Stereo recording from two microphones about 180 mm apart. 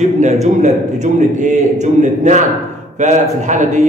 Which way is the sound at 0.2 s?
40° right (ahead or behind).